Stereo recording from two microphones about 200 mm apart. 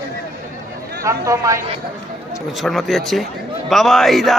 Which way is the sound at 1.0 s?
15° right (ahead or behind).